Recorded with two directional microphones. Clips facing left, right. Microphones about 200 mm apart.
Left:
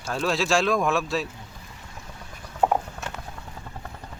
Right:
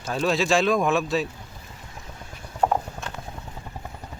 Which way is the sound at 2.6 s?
10° left (ahead or behind).